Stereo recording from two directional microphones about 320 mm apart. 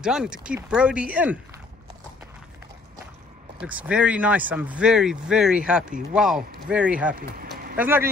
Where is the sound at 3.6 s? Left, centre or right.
Centre.